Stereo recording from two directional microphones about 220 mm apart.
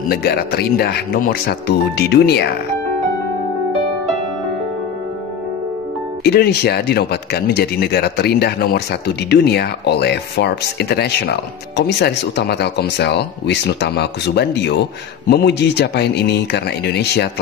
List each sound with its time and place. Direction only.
0.1 s speech: 45° left (ahead or behind)
6.2 s speech: 45° left (ahead or behind)